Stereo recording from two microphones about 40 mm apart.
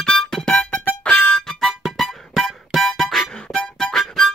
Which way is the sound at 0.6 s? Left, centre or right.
Left.